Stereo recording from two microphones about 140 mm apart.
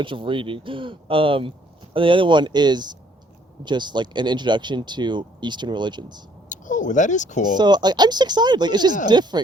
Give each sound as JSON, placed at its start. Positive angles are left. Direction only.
{"t": 0.0, "sound": "speech", "side_deg": -35}
{"t": 6.5, "sound": "speech", "side_deg": 65}
{"t": 7.5, "sound": "speech", "side_deg": -30}